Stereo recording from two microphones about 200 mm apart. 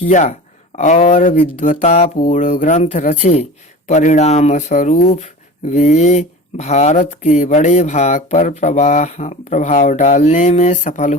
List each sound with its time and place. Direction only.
0.0 s speech: 40° left (ahead or behind)